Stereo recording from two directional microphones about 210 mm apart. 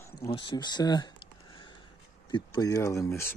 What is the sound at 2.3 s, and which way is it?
Speech, 20° left (ahead or behind).